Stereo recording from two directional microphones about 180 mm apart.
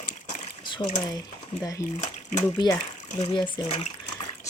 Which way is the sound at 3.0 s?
40° left (ahead or behind).